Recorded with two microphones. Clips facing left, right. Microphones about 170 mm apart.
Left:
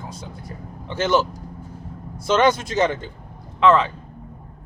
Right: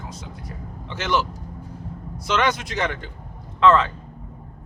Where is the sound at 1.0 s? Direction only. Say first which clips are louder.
Left 4 dB; 30° left (ahead or behind).